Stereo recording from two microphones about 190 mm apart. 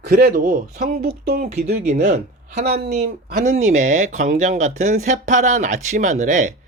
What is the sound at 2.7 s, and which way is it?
Speech, 60° right (ahead or behind).